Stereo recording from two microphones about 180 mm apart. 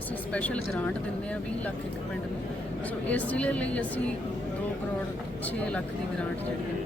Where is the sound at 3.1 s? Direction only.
10° left (ahead or behind).